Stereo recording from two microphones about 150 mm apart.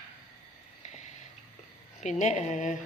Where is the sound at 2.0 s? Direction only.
50° left (ahead or behind).